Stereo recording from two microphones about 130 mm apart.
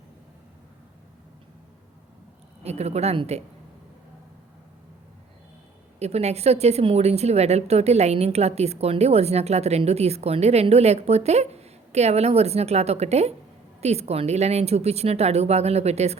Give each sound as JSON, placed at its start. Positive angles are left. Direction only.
{"t": 2.6, "sound": "speech", "side_deg": -55}
{"t": 6.0, "sound": "a woman's voice", "side_deg": -55}